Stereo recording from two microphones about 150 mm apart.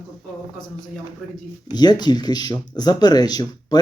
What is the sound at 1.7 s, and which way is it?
Speech, 25° left (ahead or behind).